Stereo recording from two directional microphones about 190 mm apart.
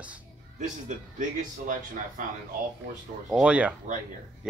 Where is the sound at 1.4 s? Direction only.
45° right (ahead or behind).